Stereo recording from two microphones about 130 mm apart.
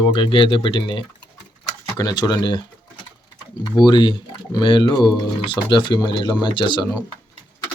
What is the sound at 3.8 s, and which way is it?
Speech, 35° left (ahead or behind).